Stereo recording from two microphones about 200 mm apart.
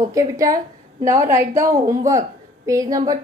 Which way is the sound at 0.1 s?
15° right (ahead or behind).